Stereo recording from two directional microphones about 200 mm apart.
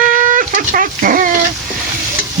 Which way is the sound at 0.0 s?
45° right (ahead or behind).